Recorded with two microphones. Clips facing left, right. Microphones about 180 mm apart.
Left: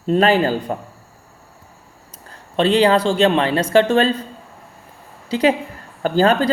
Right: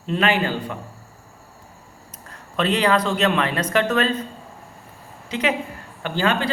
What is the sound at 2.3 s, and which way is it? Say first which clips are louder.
Speech: left 6 dB; 30° left (ahead or behind).